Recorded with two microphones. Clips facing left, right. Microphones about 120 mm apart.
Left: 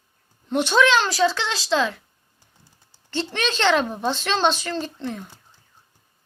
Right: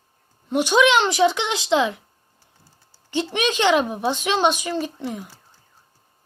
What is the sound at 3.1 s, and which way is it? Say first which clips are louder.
A woman's voice: right 3 dB; 15° right (ahead or behind).